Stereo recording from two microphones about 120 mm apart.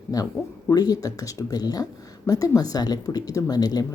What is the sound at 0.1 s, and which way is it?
Speech, 30° left (ahead or behind).